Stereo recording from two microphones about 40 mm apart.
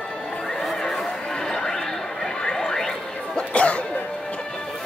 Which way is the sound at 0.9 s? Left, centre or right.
Centre.